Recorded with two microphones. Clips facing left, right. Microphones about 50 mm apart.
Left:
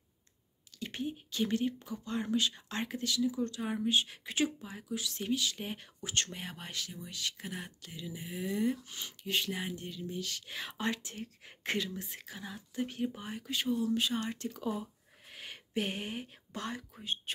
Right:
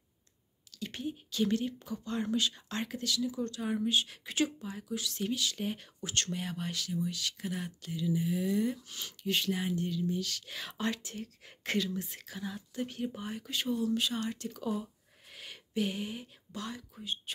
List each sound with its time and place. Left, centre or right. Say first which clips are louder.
0.7 s speech: even; left
15.7 s speech: right 2 dB; left